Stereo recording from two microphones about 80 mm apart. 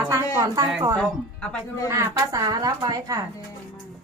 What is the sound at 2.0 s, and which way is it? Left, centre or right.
Speech, right.